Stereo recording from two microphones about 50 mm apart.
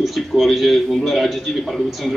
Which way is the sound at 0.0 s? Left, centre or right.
Centre.